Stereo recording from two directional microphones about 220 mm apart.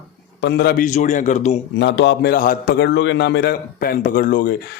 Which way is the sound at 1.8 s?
55° left (ahead or behind).